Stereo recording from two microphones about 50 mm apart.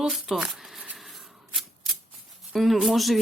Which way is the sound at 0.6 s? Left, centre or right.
Centre.